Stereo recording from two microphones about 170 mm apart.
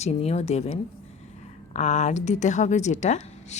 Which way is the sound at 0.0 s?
40° left (ahead or behind).